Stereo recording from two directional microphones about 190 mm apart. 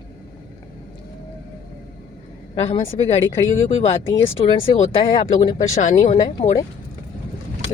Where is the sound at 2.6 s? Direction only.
35° left (ahead or behind).